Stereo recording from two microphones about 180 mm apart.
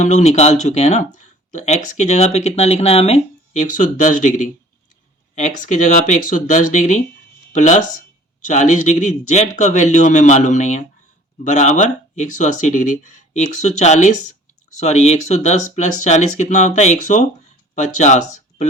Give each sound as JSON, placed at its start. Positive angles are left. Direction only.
{"t": 0.0, "sound": "speech", "side_deg": 40}